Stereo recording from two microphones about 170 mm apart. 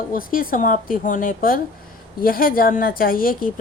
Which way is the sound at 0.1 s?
55° left (ahead or behind).